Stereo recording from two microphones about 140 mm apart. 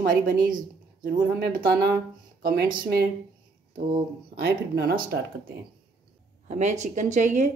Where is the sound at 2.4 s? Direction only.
90° right.